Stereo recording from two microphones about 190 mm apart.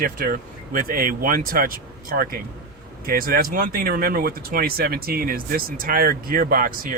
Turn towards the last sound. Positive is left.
turn(degrees=-50)  # may be behind; listen again after turning